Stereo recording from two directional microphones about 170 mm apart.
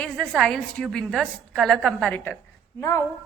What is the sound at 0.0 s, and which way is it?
A woman's voice, 5° left (ahead or behind).